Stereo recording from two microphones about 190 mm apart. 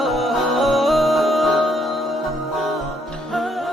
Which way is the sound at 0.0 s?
Centre (ahead or behind).